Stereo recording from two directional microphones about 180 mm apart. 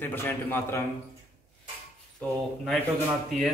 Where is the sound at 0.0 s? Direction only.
10° left (ahead or behind).